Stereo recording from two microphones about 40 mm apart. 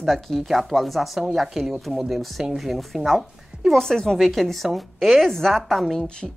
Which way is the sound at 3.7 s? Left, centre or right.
Centre.